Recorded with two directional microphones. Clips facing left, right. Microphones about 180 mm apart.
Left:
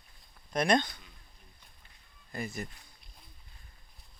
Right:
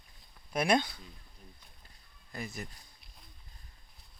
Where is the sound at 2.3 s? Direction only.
Centre (ahead or behind).